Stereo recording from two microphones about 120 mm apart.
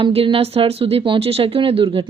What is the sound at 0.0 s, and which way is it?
A woman's voice, 50° right (ahead or behind).